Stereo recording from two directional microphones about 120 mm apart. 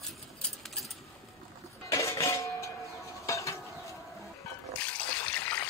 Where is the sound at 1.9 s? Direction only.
25° left (ahead or behind).